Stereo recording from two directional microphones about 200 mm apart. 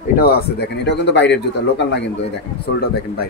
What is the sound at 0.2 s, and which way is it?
Speech, 55° left (ahead or behind).